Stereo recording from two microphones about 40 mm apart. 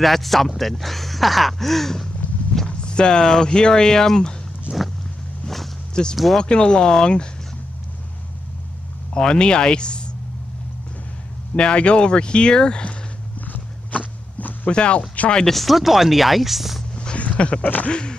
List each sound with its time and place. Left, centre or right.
0.0 s speech: centre
2.8 s speech: left
4.7 s vehicle: right
6.0 s speech: left
9.1 s speech: left
11.5 s speech: left
13.9 s walk: left
14.7 s speech: left
15.4 s speech: centre
16.9 s a sound: left
17.8 s speech: left